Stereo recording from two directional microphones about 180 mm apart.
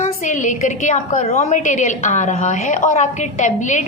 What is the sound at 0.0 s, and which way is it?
A woman's voice, 45° left (ahead or behind).